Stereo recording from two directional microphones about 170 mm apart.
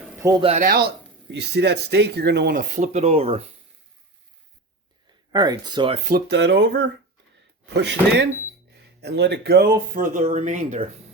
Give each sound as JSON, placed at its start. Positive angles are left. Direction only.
{"t": 0.2, "sound": "speech", "side_deg": -20}
{"t": 0.6, "sound": "speech", "side_deg": -65}
{"t": 5.3, "sound": "speech", "side_deg": -25}
{"t": 6.1, "sound": "speech", "side_deg": -70}
{"t": 9.0, "sound": "speech", "side_deg": -80}